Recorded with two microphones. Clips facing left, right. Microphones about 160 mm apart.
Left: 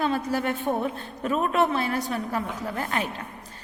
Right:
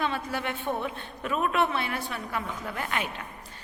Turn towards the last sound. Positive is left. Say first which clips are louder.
# left 3 dB
turn(degrees=35)  # may be behind; listen again after turning